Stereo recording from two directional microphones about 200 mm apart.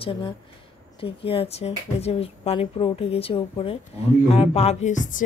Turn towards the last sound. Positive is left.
turn(degrees=40)  # may be behind; listen again after turning